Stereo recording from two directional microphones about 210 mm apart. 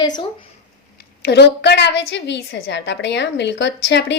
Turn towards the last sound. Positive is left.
turn(degrees=55)  # may be behind; listen again after turning